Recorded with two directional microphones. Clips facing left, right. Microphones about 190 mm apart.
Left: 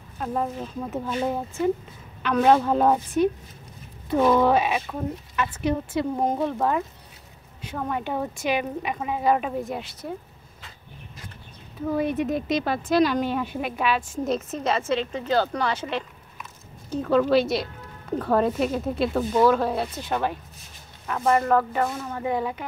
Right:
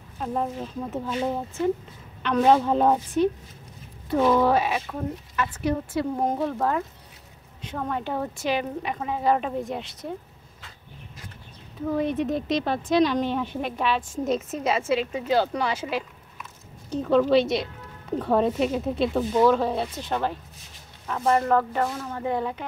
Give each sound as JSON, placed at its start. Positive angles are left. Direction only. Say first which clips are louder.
{"t": 0.2, "sound": "a woman's voice", "louder": "even", "side_deg": 0}
{"t": 4.2, "sound": "speech", "louder": "left 1 dB", "side_deg": 0}
{"t": 4.5, "sound": "speech", "louder": "left 1 dB", "side_deg": 20}
{"t": 11.9, "sound": "speech", "louder": "even", "side_deg": 10}